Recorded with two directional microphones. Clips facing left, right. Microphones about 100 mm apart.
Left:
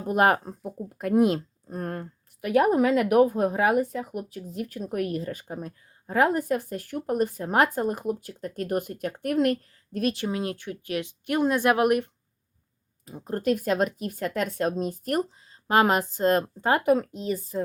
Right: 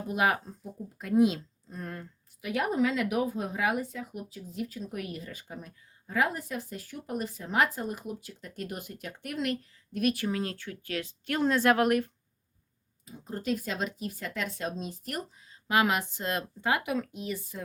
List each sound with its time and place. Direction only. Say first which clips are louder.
0.1 s speech: left 7 dB; 50° left (ahead or behind)
10.0 s speech: left 2 dB; 25° left (ahead or behind)
13.1 s a woman's voice: left 7 dB; 55° left (ahead or behind); by 17.6 s 35° left (ahead or behind)